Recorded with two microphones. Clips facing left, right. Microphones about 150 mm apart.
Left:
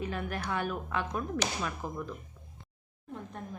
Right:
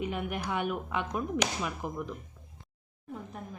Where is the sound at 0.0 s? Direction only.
15° right (ahead or behind).